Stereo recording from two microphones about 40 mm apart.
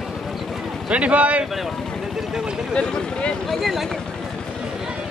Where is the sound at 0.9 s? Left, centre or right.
Right.